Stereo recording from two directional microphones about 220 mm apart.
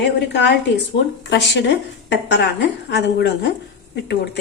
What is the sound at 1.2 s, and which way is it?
A woman's voice, 55° left (ahead or behind).